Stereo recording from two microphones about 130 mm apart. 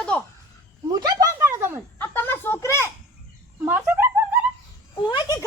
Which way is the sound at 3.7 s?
15° right (ahead or behind).